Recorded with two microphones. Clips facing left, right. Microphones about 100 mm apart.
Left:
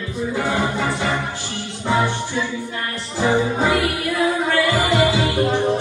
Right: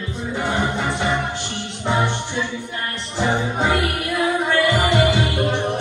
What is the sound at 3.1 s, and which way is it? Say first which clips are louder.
Music: left 3 dB; 20° right (ahead or behind).